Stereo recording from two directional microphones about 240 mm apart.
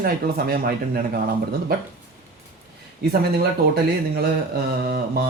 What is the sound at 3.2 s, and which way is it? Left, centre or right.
Speech, right.